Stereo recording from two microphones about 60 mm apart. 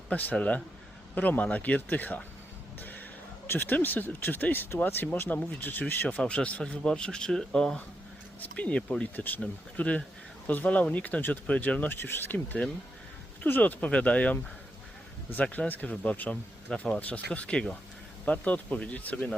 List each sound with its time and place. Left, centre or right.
0.1 s speech: left
3.4 s speech: left; by 7.8 s centre
8.5 s speech: left
15.4 s speech: left